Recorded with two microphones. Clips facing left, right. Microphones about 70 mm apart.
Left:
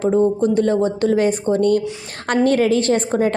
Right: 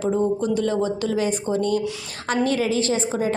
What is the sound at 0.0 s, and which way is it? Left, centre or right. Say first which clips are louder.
A woman's voice: left 5 dB; left.